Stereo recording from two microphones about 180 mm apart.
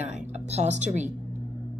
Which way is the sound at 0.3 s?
40° right (ahead or behind).